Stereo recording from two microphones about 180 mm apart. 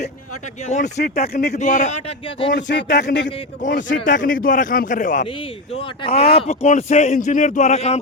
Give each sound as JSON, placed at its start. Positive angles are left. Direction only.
{"t": 0.7, "sound": "a man's voice", "side_deg": 40}
{"t": 2.5, "sound": "speech", "side_deg": 80}
{"t": 4.0, "sound": "a man's voice", "side_deg": 45}
{"t": 5.7, "sound": "speech", "side_deg": 30}